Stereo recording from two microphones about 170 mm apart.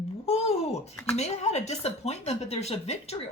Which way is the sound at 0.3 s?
40° left (ahead or behind).